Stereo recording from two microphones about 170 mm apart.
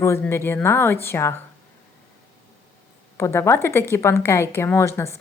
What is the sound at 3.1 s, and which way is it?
A woman's voice, 15° left (ahead or behind).